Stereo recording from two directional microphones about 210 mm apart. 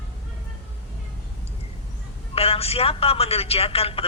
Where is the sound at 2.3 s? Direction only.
30° left (ahead or behind).